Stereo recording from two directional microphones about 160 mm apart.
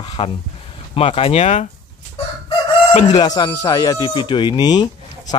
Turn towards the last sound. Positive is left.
turn(degrees=25)  # may be behind; listen again after turning